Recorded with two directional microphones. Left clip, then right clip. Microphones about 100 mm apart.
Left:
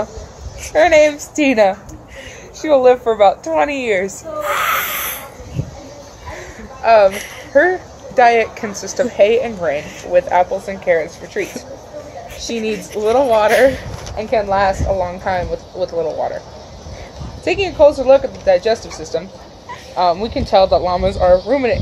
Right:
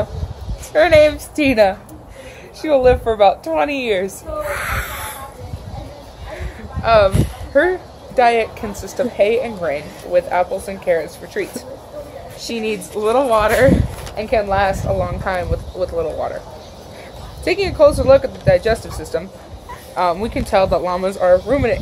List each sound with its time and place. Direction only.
0.7 s a woman's voice: centre (ahead or behind)
6.3 s a sound: 10° left (ahead or behind)
7.5 s speech: 10° left (ahead or behind)
8.2 s a woman's voice: 25° left (ahead or behind)
13.0 s speech: centre (ahead or behind)
17.5 s speech: centre (ahead or behind)
18.9 s speech: 20° right (ahead or behind); by 21.7 s 10° left (ahead or behind)